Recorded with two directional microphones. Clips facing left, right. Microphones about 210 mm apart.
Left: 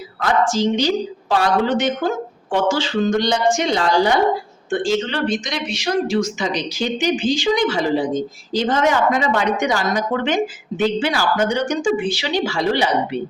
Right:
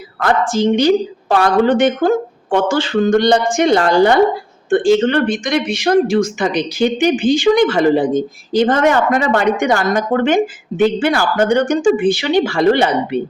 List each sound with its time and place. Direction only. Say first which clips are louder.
0.2 s speech: right 3 dB; 55° right (ahead or behind)